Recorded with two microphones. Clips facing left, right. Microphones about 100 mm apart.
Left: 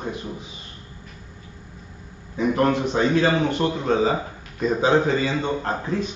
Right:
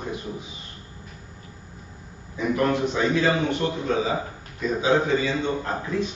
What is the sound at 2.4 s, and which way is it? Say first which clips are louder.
A man's voice: left 2 dB; 40° left (ahead or behind).